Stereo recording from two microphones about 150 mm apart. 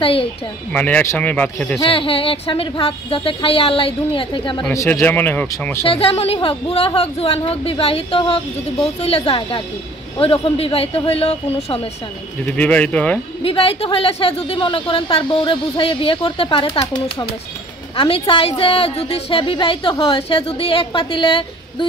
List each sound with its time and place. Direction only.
0.0 s a woman's voice: 35° left (ahead or behind)
0.7 s speech: 10° left (ahead or behind)
1.9 s a woman's voice: 35° left (ahead or behind)
4.7 s speech: 15° left (ahead or behind)
5.9 s a woman's voice: 40° left (ahead or behind)
12.4 s speech: 10° left (ahead or behind)
13.4 s a woman's voice: 40° left (ahead or behind)
16.8 s speech: 25° left (ahead or behind)
17.9 s a woman's voice: 35° left (ahead or behind)